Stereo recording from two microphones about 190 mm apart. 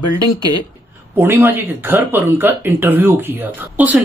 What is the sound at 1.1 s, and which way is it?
Speech, 10° right (ahead or behind).